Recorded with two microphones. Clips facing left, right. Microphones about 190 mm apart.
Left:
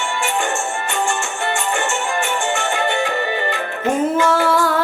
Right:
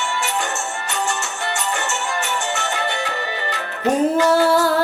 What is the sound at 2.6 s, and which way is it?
Music, 15° left (ahead or behind).